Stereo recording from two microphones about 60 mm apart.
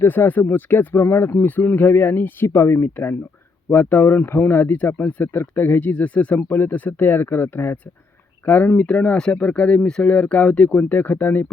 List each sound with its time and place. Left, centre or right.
0.0 s speech: left
1.3 s speech: left
5.9 s speech: left
6.3 s speech: left